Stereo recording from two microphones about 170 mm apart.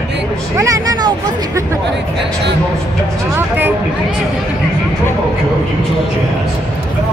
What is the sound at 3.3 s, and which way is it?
Vehicle, 10° right (ahead or behind).